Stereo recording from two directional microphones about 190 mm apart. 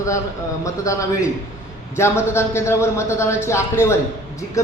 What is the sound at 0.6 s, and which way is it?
A man's voice, 15° left (ahead or behind).